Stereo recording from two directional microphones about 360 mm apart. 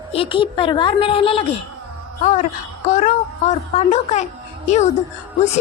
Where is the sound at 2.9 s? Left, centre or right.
Left.